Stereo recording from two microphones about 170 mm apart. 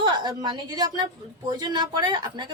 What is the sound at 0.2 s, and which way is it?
A woman's voice, 25° right (ahead or behind).